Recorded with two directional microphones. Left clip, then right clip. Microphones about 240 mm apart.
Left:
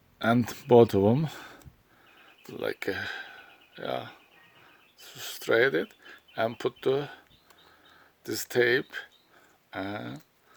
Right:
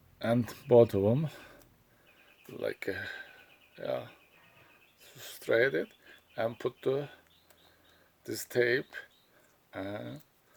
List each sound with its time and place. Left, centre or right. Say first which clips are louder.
0.2 s speech: left 5 dB; left
8.2 s speech: left 4 dB; left